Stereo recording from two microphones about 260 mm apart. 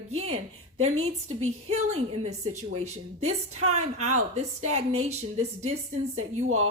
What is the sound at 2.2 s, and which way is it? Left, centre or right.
A woman's voice, right.